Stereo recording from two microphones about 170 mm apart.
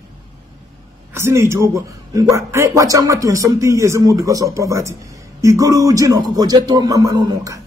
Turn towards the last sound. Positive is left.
turn(degrees=-25)  # may be behind; listen again after turning